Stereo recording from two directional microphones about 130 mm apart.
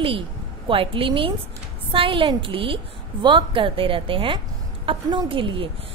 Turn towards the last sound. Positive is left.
turn(degrees=-40)  # may be behind; listen again after turning